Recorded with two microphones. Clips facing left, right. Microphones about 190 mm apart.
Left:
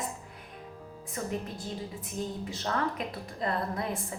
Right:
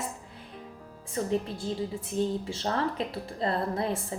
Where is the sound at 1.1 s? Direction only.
30° right (ahead or behind).